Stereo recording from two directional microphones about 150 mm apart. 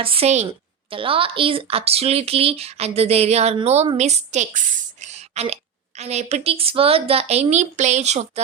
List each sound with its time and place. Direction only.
0.0 s speech: 40° right (ahead or behind)